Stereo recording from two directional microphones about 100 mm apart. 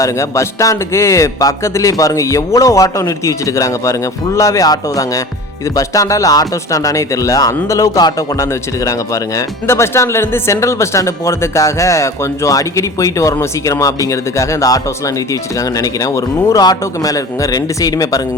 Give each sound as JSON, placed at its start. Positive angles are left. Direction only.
{"t": 0.0, "sound": "speech", "side_deg": 30}